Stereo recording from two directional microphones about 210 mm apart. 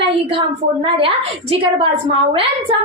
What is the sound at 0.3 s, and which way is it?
A woman's voice, 25° right (ahead or behind).